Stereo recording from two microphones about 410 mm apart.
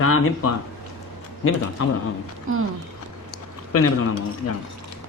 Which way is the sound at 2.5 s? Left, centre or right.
Right.